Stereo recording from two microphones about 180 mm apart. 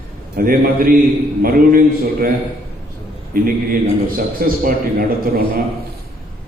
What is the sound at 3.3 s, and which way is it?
A man's voice, 55° right (ahead or behind).